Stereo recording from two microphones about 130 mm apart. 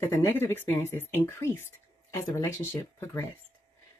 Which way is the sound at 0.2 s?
15° left (ahead or behind).